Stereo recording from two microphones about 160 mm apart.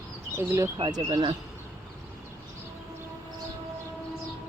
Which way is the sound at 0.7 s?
30° right (ahead or behind).